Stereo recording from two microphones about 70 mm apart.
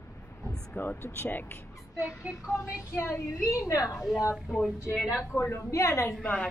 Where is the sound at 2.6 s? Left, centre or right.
Left.